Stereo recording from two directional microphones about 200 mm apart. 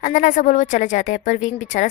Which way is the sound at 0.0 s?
40° left (ahead or behind).